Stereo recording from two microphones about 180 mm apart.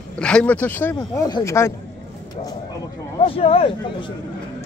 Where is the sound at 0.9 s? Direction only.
20° left (ahead or behind).